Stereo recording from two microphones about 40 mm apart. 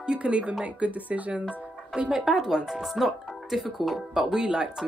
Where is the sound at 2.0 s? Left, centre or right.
Right.